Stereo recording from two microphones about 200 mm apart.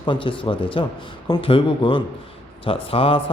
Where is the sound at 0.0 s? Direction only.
25° left (ahead or behind).